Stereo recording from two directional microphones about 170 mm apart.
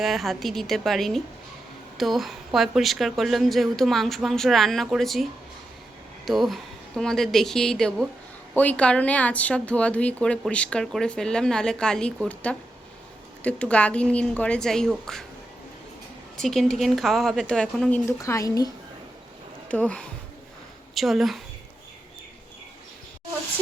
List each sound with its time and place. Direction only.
0.0 s speech: centre (ahead or behind)
16.4 s speech: centre (ahead or behind)
18.2 s a woman's voice: 20° left (ahead or behind)
19.6 s speech: 10° left (ahead or behind)